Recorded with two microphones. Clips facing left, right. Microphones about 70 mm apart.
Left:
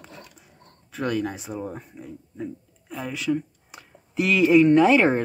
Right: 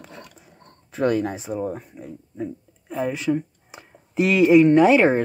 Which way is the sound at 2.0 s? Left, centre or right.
Right.